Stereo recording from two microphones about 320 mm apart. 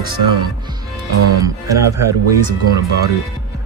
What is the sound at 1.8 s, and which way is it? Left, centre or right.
Speech, right.